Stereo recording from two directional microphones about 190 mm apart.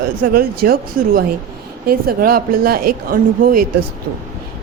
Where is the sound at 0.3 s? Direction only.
50° right (ahead or behind).